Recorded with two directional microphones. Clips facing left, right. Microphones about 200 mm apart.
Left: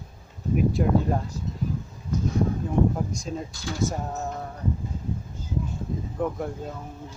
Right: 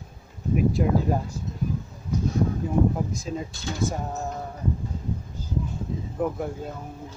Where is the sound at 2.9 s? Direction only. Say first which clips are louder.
Right 1 dB; centre (ahead or behind).